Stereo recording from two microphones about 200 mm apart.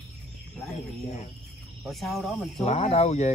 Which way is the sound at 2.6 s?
30° left (ahead or behind).